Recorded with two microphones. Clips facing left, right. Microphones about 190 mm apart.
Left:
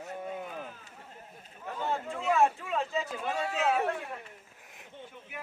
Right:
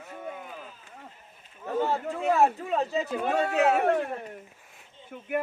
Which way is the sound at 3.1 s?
60° right (ahead or behind).